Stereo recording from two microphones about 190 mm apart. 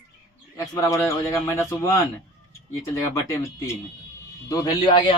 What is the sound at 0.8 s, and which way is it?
Speech, 15° left (ahead or behind).